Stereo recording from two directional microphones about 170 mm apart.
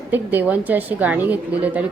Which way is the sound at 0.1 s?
10° right (ahead or behind).